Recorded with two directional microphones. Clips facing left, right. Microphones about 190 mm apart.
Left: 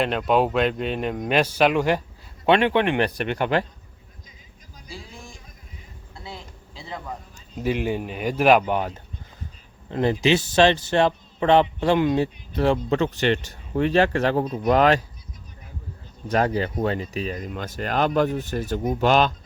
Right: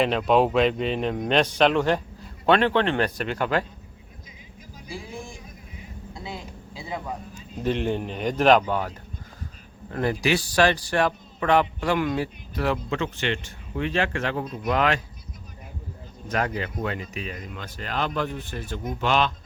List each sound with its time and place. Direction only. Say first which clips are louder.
0.0 s speech: right 1 dB; centre (ahead or behind)
4.9 s a sound: right 4 dB; 15° right (ahead or behind)
7.6 s speech: left 1 dB; 10° left (ahead or behind)
8.6 s a man's voice: left 2 dB; 20° left (ahead or behind)
9.9 s a man's voice: left 4 dB; 20° left (ahead or behind)
16.3 s speech: left 5 dB; 30° left (ahead or behind)